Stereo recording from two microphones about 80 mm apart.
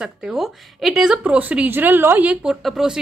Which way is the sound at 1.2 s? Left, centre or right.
Centre.